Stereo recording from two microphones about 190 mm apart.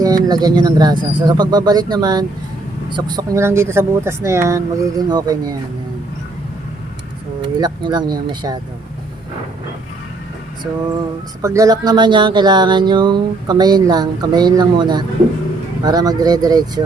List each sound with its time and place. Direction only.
0.0 s speech: 20° right (ahead or behind)
7.6 s speech: 20° right (ahead or behind)
11.4 s speech: 15° right (ahead or behind)